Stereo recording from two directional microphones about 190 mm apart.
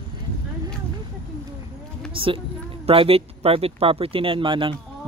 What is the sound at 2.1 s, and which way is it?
Speech, 30° right (ahead or behind).